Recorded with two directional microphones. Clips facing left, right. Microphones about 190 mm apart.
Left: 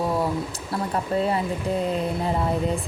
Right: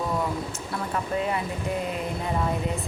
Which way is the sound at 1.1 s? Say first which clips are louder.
Left 4 dB; 35° left (ahead or behind).